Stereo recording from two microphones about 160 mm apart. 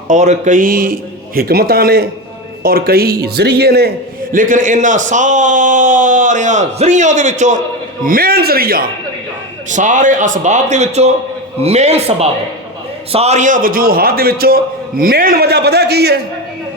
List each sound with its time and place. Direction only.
0.1 s a man's voice: 50° right (ahead or behind)
8.0 s a man's voice: 65° right (ahead or behind)
9.6 s a man's voice: 50° right (ahead or behind); by 16.2 s 90° right